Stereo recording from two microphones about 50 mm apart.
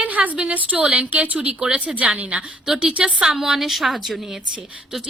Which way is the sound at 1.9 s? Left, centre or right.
Right.